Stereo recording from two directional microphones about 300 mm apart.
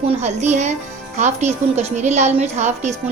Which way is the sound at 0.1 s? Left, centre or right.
Right.